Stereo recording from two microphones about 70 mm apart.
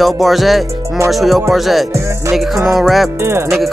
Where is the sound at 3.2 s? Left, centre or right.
Right.